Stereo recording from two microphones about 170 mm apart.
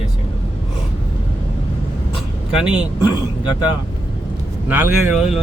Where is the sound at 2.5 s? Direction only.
5° right (ahead or behind).